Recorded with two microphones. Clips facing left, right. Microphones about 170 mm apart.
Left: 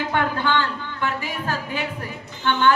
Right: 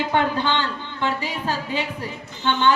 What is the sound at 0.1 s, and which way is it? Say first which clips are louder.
A woman's voice: left 1 dB; 20° right (ahead or behind).